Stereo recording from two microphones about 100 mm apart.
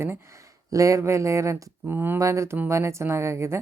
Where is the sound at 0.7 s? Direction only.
35° right (ahead or behind).